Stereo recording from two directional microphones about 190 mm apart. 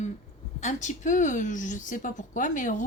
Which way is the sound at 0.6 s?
40° left (ahead or behind).